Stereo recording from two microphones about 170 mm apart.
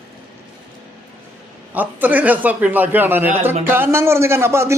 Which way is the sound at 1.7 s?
10° right (ahead or behind).